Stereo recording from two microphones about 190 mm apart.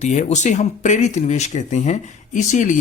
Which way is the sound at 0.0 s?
40° left (ahead or behind).